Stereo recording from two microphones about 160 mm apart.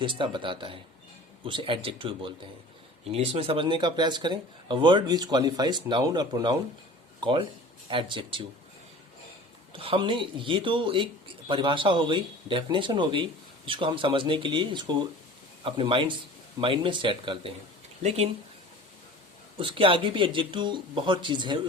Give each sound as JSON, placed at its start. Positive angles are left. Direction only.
{"t": 0.0, "sound": "speech", "side_deg": -30}
{"t": 9.7, "sound": "speech", "side_deg": -35}
{"t": 19.5, "sound": "speech", "side_deg": -35}